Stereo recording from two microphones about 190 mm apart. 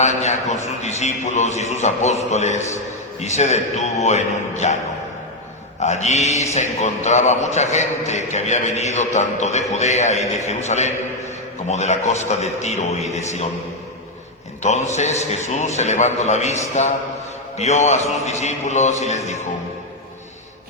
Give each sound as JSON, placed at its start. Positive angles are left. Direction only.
{"t": 0.0, "sound": "a man's voice", "side_deg": 35}
{"t": 5.8, "sound": "a man's voice", "side_deg": 35}
{"t": 14.6, "sound": "a man's voice", "side_deg": 35}